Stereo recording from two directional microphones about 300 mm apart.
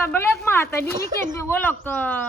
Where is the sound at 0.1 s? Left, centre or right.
Centre.